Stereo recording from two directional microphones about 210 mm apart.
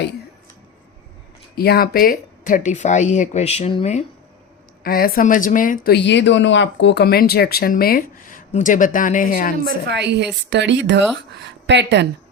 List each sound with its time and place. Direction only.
1.5 s speech: 45° left (ahead or behind); by 4.0 s 30° left (ahead or behind)
4.8 s speech: 45° left (ahead or behind)
9.9 s a woman's voice: 55° right (ahead or behind)